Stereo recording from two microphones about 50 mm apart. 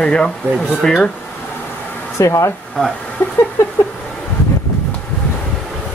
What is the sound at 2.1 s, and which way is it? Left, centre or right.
Speech, left.